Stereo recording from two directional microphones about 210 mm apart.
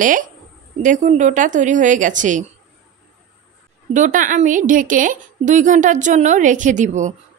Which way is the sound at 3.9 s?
40° right (ahead or behind).